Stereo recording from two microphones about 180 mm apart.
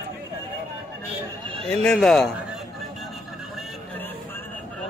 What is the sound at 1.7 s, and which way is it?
Speech, 5° left (ahead or behind).